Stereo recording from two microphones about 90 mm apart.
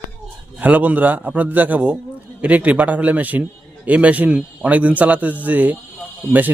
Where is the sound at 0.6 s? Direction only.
15° right (ahead or behind).